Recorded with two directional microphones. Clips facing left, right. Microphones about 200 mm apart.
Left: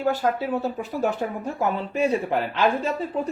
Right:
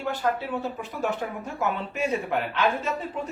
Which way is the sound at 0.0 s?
40° left (ahead or behind).